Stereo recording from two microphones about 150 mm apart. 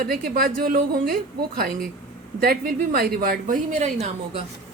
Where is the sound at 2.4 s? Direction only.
80° right; by 3.9 s 60° right (ahead or behind).